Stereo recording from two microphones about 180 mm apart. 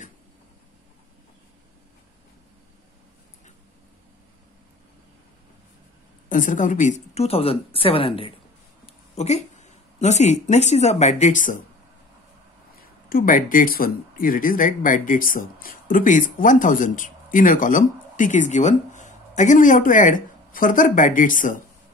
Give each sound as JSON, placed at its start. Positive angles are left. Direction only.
{"t": 6.2, "sound": "a woman's voice", "side_deg": 45}
{"t": 13.1, "sound": "speech", "side_deg": 50}